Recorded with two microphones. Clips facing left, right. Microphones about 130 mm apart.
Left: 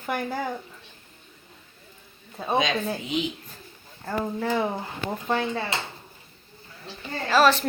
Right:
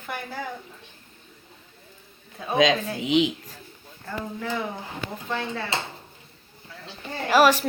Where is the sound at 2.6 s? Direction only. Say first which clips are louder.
Right 5 dB; 90° right.